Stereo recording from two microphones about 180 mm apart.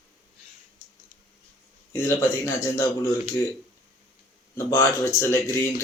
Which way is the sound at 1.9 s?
15° left (ahead or behind).